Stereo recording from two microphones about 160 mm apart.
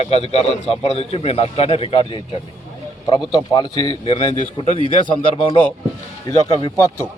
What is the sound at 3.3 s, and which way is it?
A man's voice, 30° left (ahead or behind).